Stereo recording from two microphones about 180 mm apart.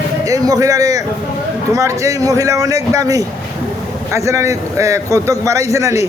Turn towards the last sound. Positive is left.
turn(degrees=-15)  # may be behind; listen again after turning